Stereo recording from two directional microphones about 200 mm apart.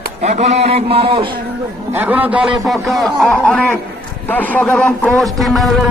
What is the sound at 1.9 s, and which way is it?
A man's voice, 10° right (ahead or behind).